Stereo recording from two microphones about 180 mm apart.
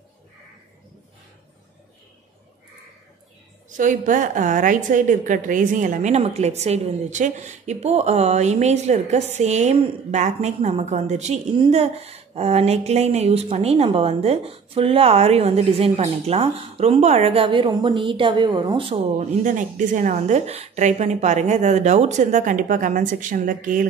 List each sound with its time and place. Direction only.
3.7 s speech: 45° right (ahead or behind); by 19.2 s 30° right (ahead or behind)
19.4 s a woman's voice: 45° right (ahead or behind)